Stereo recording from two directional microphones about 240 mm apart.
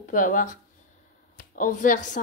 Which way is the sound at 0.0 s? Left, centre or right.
Left.